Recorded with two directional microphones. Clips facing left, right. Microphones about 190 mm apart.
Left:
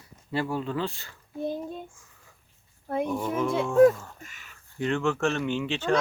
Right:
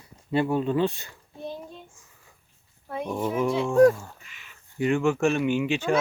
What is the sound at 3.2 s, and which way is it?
Speech, 10° right (ahead or behind).